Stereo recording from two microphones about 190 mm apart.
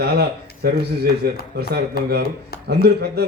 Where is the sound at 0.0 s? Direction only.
55° right (ahead or behind).